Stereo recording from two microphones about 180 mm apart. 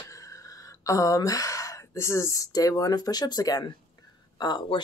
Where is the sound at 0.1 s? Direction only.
20° left (ahead or behind).